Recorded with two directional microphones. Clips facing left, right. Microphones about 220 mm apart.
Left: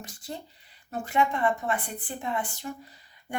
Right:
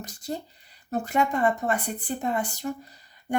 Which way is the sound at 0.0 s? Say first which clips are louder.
Right 6 dB; 40° right (ahead or behind).